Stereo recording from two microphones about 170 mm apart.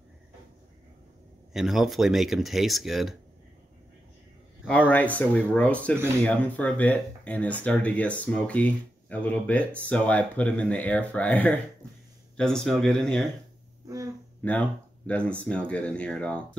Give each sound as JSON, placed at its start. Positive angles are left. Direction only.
{"t": 1.5, "sound": "speech", "side_deg": 0}
{"t": 4.6, "sound": "speech", "side_deg": 10}
{"t": 13.8, "sound": "a sound", "side_deg": -20}
{"t": 14.4, "sound": "speech", "side_deg": 10}